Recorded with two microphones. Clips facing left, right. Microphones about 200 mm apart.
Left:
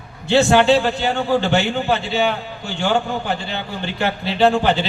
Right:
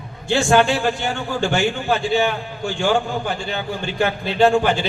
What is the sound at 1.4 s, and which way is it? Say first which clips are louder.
Speech: left 1 dB; 50° right (ahead or behind).